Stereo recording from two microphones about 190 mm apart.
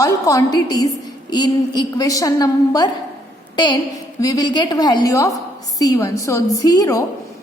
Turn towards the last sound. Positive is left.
turn(degrees=20)  # may be behind; listen again after turning